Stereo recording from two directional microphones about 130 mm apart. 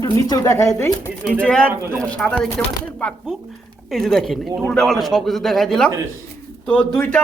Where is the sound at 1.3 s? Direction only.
10° left (ahead or behind).